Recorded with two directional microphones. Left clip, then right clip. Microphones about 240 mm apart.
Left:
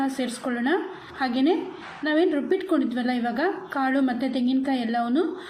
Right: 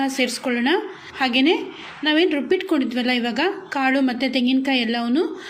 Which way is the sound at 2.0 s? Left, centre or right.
Right.